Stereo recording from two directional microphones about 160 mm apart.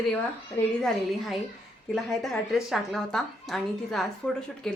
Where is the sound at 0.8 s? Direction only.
Centre (ahead or behind).